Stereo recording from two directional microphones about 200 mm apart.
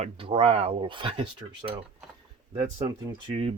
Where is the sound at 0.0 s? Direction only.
30° right (ahead or behind).